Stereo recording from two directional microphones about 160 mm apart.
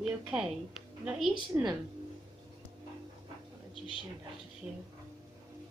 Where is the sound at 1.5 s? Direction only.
20° right (ahead or behind).